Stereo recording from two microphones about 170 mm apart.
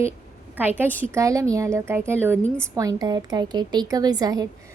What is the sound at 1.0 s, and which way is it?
A woman's voice, 15° right (ahead or behind).